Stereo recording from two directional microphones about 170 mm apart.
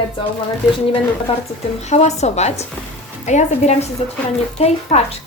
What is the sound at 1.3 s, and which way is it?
A woman's voice, 35° left (ahead or behind).